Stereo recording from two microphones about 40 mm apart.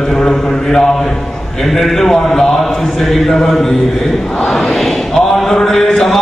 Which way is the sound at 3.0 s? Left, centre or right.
Centre.